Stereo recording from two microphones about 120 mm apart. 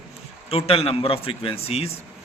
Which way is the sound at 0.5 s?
55° left (ahead or behind).